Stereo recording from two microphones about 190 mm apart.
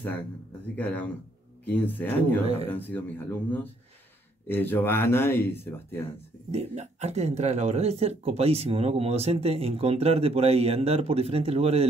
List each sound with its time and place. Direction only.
0.7 s speech: 10° left (ahead or behind)
6.5 s speech: 35° right (ahead or behind)